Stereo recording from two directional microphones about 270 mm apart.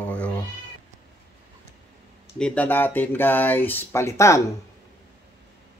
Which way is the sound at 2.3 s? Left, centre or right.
Centre.